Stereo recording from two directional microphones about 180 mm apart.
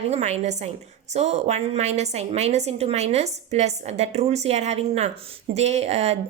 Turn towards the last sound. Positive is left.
turn(degrees=-35)  # may be behind; listen again after turning